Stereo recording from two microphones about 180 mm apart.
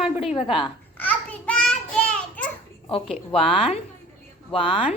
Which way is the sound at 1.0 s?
10° left (ahead or behind).